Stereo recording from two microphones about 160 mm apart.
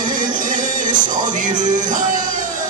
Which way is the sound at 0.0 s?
55° right (ahead or behind).